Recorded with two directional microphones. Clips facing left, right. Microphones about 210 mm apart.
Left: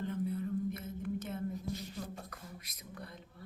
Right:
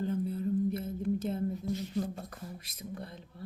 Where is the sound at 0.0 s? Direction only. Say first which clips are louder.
Right 4 dB; 30° right (ahead or behind).